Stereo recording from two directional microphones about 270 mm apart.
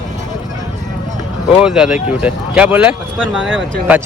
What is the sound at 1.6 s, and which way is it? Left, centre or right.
A man's voice, centre.